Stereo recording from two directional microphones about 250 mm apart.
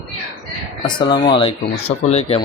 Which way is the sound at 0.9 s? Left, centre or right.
Centre.